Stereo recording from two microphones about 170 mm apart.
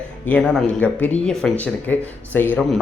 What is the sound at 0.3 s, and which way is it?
Speech, 5° left (ahead or behind).